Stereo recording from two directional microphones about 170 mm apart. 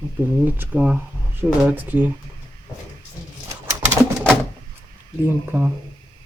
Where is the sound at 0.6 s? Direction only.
10° right (ahead or behind).